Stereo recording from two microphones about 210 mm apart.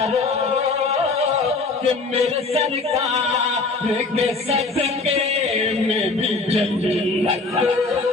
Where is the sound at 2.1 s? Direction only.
30° right (ahead or behind).